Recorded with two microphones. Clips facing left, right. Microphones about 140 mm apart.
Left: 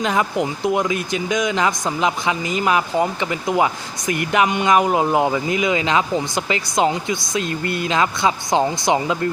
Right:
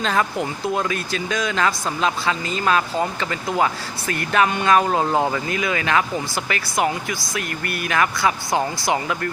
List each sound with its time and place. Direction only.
0.0 s speech: 15° left (ahead or behind)